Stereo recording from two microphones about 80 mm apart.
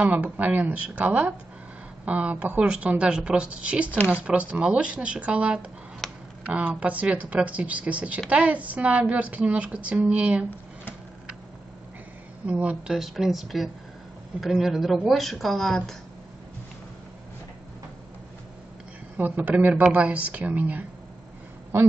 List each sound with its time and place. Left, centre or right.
0.0 s a woman's voice: centre
6.0 s a sound: centre
6.4 s a woman's voice: centre
12.4 s a woman's voice: centre
12.9 s speech: centre
19.1 s speech: right